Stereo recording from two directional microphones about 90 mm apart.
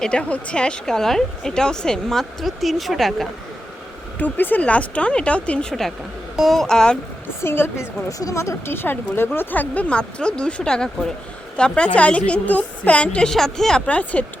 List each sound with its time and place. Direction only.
0.0 s a woman's voice: 10° left (ahead or behind)
4.2 s a woman's voice: 20° left (ahead or behind)
7.4 s a woman's voice: 25° left (ahead or behind); by 13.8 s 5° left (ahead or behind)
13.8 s a woman's voice: 15° left (ahead or behind)